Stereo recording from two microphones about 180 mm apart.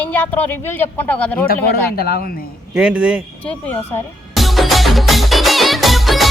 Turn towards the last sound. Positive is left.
turn(degrees=0)  # may be behind; listen again after turning